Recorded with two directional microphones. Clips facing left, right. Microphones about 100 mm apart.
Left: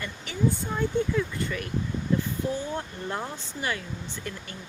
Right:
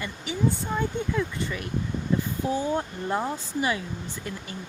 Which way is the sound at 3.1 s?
15° right (ahead or behind).